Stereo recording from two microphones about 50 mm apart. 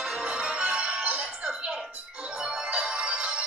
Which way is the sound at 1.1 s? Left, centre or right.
Centre.